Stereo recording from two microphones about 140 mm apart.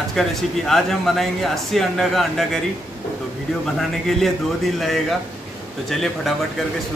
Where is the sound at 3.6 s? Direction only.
Centre (ahead or behind).